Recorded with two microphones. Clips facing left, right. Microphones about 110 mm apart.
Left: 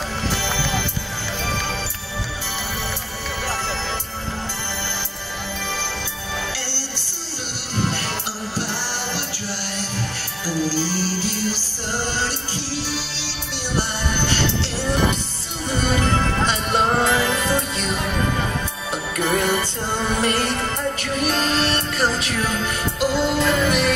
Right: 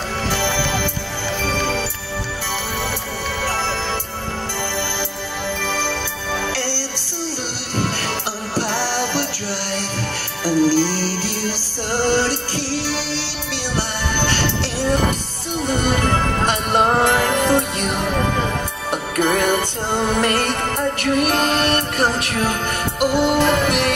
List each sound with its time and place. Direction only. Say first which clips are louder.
10.4 s music: right 7 dB; 50° right (ahead or behind)
13.7 s music: even; 55° right (ahead or behind)
15.7 s music: right 1 dB; 60° right (ahead or behind)